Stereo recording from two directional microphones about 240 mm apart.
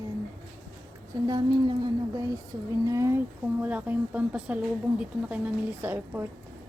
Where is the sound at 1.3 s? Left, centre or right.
Centre.